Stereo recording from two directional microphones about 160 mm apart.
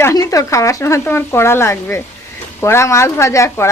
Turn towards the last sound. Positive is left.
turn(degrees=15)  # may be behind; listen again after turning